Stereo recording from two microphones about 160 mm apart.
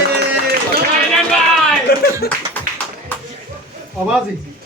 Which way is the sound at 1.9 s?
75° left (ahead or behind).